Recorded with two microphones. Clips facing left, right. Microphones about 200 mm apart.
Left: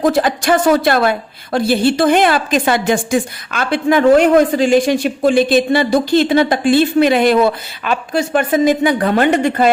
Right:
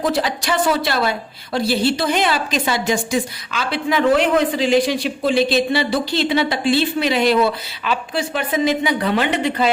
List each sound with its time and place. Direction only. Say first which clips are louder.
0.0 s a woman's voice: left 6 dB; 50° left (ahead or behind)